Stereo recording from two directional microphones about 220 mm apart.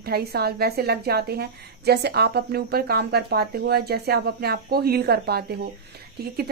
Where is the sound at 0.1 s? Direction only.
45° right (ahead or behind).